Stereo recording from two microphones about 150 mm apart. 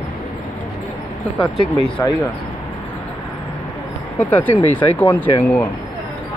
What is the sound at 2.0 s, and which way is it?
Speech, 20° left (ahead or behind).